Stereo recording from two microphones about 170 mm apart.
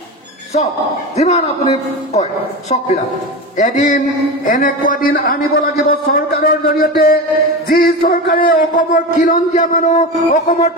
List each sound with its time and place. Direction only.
1.1 s a man's voice: 40° left (ahead or behind)
3.5 s a man's voice: 45° left (ahead or behind)